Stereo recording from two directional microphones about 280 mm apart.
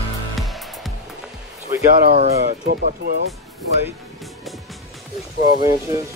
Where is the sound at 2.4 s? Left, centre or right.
Right.